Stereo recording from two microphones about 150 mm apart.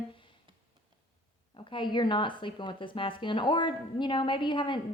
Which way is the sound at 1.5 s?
35° left (ahead or behind).